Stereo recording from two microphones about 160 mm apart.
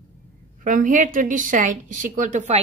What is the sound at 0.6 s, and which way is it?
A woman's voice, 55° right (ahead or behind).